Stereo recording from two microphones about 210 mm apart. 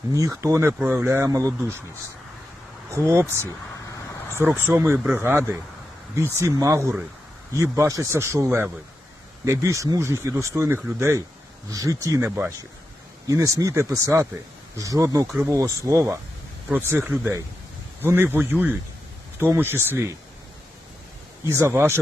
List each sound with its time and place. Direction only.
0.1 s speech: 15° right (ahead or behind)
2.9 s speech: 10° right (ahead or behind)
4.4 s speech: 10° right (ahead or behind)
21.5 s speech: 10° right (ahead or behind)